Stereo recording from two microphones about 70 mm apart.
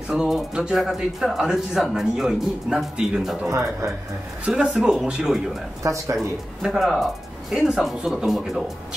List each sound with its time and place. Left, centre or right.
0.1 s a man's voice: centre
3.4 s speech: right
4.6 s a man's voice: centre